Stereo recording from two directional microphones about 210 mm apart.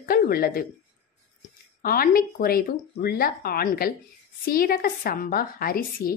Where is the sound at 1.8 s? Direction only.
45° left (ahead or behind).